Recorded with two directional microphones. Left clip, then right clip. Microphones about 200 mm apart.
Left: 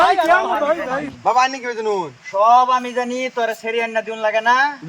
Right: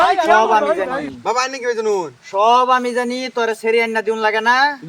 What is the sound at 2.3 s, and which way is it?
Speech, 30° right (ahead or behind).